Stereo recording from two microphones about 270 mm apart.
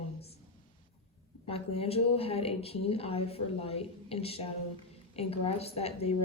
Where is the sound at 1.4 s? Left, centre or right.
Left.